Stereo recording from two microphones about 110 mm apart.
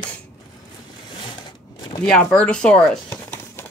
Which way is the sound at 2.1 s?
5° left (ahead or behind).